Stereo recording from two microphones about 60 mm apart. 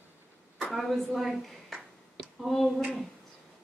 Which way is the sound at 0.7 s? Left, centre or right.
Centre.